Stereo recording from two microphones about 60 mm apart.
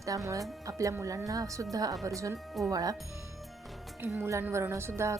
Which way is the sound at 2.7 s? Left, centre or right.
Right.